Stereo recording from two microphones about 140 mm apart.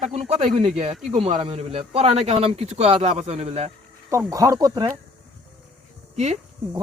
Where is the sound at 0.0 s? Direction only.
50° right (ahead or behind).